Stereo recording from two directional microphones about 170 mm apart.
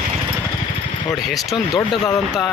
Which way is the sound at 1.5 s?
25° left (ahead or behind).